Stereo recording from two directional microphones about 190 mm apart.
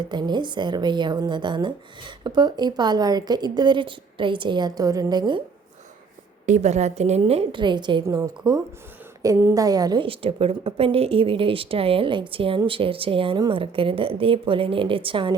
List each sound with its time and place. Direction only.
0.0 s a woman's voice: 20° right (ahead or behind)
6.4 s a woman's voice: 40° right (ahead or behind)